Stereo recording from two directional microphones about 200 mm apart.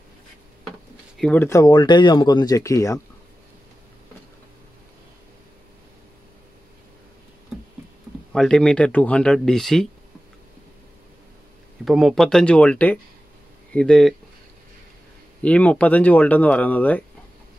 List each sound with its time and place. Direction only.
1.1 s speech: 5° left (ahead or behind)
8.3 s speech: 5° left (ahead or behind)
11.8 s speech: centre (ahead or behind)
15.4 s speech: 5° left (ahead or behind)